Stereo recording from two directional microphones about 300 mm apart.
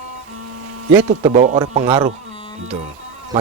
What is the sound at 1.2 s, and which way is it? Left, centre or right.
Speech, right.